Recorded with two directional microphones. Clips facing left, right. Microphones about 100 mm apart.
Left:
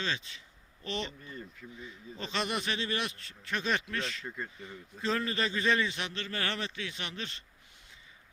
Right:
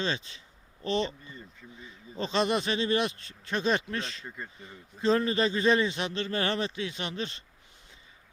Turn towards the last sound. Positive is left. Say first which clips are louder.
# right 6 dB
turn(degrees=-20)  # may be behind; listen again after turning